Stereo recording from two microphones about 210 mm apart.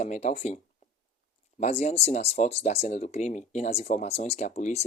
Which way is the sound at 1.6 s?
30° left (ahead or behind).